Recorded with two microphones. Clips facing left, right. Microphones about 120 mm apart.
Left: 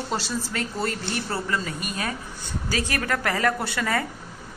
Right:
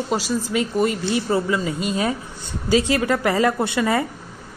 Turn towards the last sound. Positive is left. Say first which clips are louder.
# right 6 dB
turn(degrees=-20)  # may be behind; listen again after turning